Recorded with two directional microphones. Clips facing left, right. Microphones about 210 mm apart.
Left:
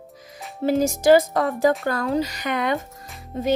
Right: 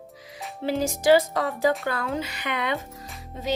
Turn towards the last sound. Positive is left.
turn(degrees=50)  # may be behind; listen again after turning